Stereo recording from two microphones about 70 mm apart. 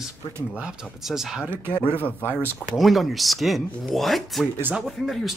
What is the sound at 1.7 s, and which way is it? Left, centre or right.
Speech, left.